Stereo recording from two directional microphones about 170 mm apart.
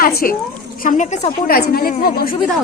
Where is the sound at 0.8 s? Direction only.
50° left (ahead or behind).